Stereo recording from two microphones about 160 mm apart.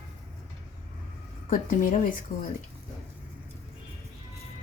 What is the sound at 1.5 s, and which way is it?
Speech, 60° left (ahead or behind).